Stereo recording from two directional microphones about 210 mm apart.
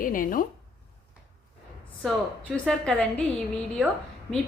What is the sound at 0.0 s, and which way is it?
Speech, 40° left (ahead or behind).